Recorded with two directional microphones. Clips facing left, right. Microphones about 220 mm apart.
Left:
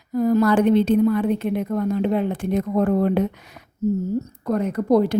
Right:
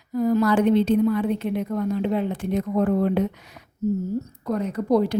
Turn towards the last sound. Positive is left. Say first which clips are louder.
# left 3 dB
turn(degrees=55)  # may be behind; listen again after turning